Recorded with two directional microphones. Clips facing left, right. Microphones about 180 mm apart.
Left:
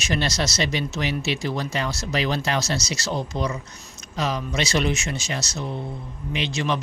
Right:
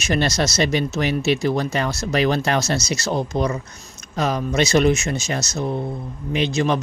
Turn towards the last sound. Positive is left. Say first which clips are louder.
# right 6 dB
turn(degrees=-45)  # may be behind; listen again after turning